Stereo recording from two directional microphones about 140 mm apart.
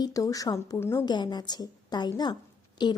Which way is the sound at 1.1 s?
30° left (ahead or behind).